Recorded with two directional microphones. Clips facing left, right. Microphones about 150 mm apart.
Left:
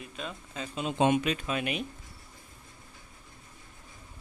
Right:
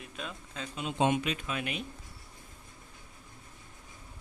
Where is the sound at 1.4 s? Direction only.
20° left (ahead or behind).